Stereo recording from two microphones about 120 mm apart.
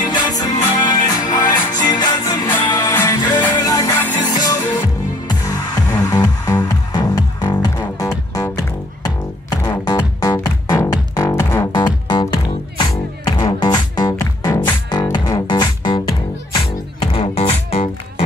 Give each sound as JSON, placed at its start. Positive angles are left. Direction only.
{"t": 0.1, "sound": "music", "side_deg": 35}
{"t": 2.4, "sound": "music", "side_deg": 15}
{"t": 2.7, "sound": "music", "side_deg": 30}
{"t": 3.9, "sound": "music", "side_deg": 15}
{"t": 4.3, "sound": "music", "side_deg": 30}
{"t": 5.9, "sound": "music", "side_deg": 25}
{"t": 11.7, "sound": "music", "side_deg": 40}
{"t": 16.5, "sound": "music", "side_deg": 45}
{"t": 17.2, "sound": "music", "side_deg": 60}